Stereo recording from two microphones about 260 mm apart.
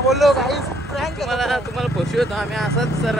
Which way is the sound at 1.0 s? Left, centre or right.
Centre.